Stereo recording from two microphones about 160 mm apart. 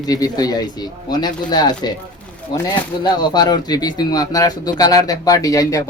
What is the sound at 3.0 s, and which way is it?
Speech, 25° left (ahead or behind).